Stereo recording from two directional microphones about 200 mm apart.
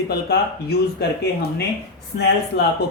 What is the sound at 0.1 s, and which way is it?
Speech, 55° left (ahead or behind).